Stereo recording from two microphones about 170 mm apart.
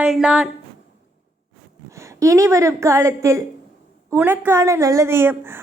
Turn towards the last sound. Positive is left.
turn(degrees=-15)  # may be behind; listen again after turning